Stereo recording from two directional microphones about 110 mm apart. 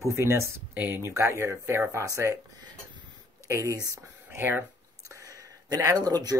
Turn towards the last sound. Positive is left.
turn(degrees=-35)  # may be behind; listen again after turning